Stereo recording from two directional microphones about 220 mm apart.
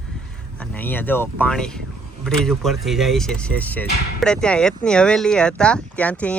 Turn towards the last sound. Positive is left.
turn(degrees=5)  # may be behind; listen again after turning